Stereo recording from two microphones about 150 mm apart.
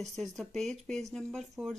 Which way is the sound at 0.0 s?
Centre (ahead or behind).